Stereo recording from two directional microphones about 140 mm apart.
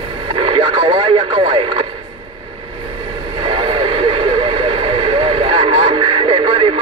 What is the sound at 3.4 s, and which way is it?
Radio, 40° right (ahead or behind).